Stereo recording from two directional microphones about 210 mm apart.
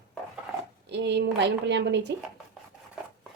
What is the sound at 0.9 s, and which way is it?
Speech, 55° right (ahead or behind).